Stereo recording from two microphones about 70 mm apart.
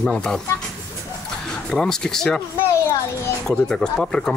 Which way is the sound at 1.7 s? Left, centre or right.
Centre.